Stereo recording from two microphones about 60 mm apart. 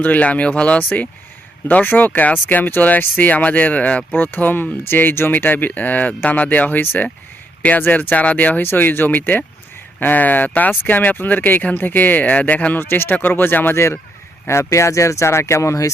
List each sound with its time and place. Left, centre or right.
0.0 s speech: left
12.8 s speech: left
13.7 s speech: left